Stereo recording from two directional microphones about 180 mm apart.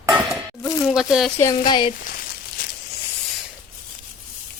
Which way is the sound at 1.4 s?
20° left (ahead or behind).